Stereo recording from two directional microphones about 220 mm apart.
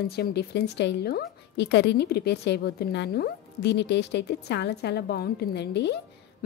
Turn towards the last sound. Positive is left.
turn(degrees=50)  # may be behind; listen again after turning